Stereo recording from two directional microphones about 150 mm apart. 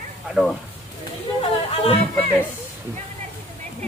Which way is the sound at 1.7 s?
45° left (ahead or behind).